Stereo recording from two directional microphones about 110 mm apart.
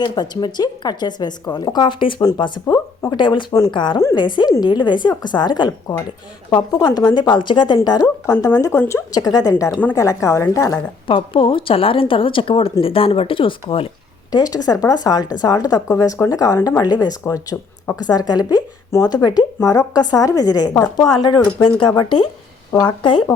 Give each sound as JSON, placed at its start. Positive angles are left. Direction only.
{"t": 0.0, "sound": "speech", "side_deg": 40}
{"t": 6.7, "sound": "speech", "side_deg": 40}
{"t": 8.3, "sound": "a woman's voice", "side_deg": 25}
{"t": 9.1, "sound": "a woman's voice", "side_deg": 35}
{"t": 11.0, "sound": "speech", "side_deg": 55}
{"t": 14.3, "sound": "speech", "side_deg": 35}
{"t": 19.1, "sound": "speech", "side_deg": 35}